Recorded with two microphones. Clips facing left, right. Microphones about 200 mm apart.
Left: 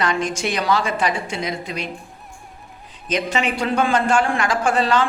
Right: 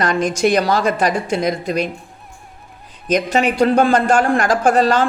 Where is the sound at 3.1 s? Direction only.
40° right (ahead or behind).